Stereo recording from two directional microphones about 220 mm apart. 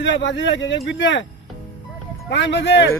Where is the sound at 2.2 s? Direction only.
55° left (ahead or behind).